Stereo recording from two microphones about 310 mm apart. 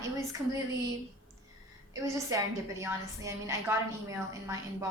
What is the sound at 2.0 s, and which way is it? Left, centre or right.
A woman's voice, centre.